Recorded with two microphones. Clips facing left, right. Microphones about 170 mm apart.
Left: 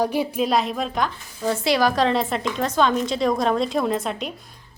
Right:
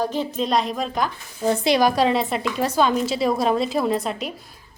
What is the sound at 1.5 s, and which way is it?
A woman's voice, 20° right (ahead or behind).